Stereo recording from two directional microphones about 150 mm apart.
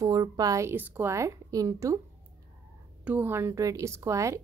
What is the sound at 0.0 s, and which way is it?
A woman's voice, 25° right (ahead or behind).